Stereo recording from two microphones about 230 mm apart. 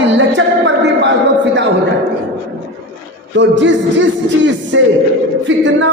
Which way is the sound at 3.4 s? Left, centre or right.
Right.